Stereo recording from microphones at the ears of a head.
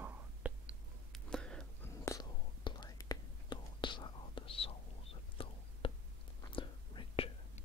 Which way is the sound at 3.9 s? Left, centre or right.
Left.